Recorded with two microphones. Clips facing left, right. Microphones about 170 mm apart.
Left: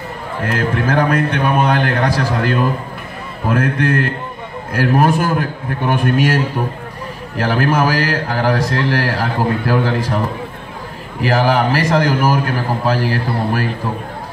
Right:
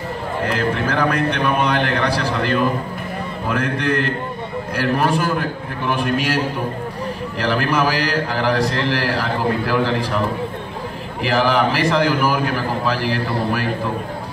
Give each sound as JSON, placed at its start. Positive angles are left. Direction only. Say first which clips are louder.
{"t": 0.5, "sound": "a man's voice", "louder": "left 4 dB", "side_deg": 50}
{"t": 11.2, "sound": "a man's voice", "louder": "left 2 dB", "side_deg": 45}